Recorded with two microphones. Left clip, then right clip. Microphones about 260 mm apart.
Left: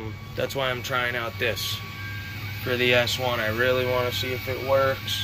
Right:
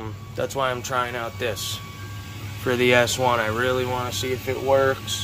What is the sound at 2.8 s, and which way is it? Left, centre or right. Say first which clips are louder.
Speech: right 3 dB; centre.